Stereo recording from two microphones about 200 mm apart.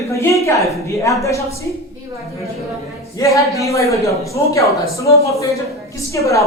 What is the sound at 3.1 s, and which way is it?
Speech, 15° left (ahead or behind).